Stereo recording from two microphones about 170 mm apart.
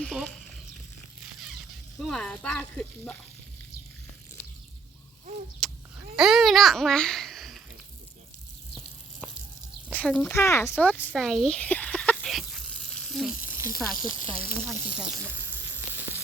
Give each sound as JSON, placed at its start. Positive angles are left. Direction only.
{"t": 0.0, "sound": "speech", "side_deg": 0}
{"t": 2.0, "sound": "speech", "side_deg": 0}
{"t": 5.6, "sound": "a sound", "side_deg": 5}
{"t": 6.1, "sound": "a child's voice", "side_deg": 0}
{"t": 9.9, "sound": "speech", "side_deg": 5}
{"t": 10.3, "sound": "a sound", "side_deg": 15}
{"t": 13.6, "sound": "speech", "side_deg": -20}
{"t": 14.1, "sound": "speech", "side_deg": -30}
{"t": 14.9, "sound": "sizzle", "side_deg": -10}